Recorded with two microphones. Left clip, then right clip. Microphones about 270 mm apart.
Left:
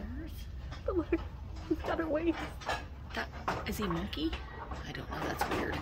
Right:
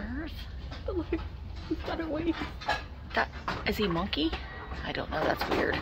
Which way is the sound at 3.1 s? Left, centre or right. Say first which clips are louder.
Right 6 dB; centre.